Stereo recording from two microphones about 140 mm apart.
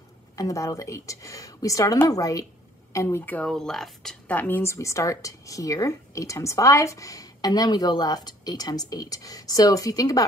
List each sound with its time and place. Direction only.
0.4 s a woman's voice: 25° left (ahead or behind)